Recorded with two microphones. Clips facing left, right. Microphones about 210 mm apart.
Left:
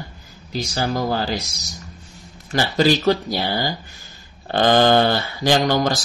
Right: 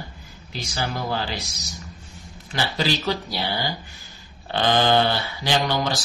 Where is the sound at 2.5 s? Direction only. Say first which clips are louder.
Left 7 dB; 45° left (ahead or behind).